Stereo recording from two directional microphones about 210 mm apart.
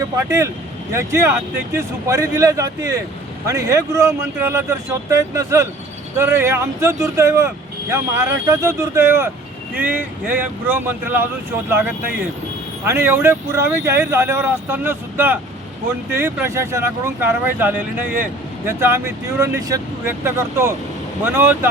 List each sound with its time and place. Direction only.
0.3 s speech: 15° right (ahead or behind)
12.8 s speech: 10° right (ahead or behind)